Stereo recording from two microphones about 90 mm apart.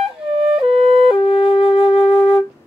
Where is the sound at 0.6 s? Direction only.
90° right.